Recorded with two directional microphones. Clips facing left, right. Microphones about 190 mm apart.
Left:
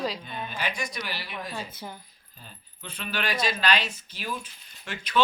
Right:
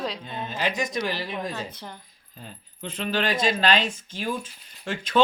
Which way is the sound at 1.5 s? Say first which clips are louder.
Right 1 dB; 5° left (ahead or behind).